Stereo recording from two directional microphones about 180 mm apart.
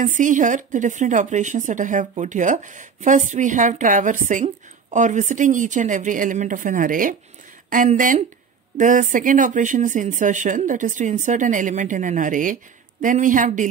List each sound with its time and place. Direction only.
0.0 s a woman's voice: 45° right (ahead or behind)